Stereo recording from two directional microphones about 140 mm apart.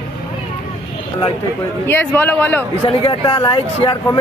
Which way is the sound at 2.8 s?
35° left (ahead or behind).